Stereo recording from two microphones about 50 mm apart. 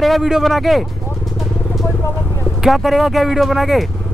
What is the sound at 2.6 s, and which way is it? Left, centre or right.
A man's voice, centre.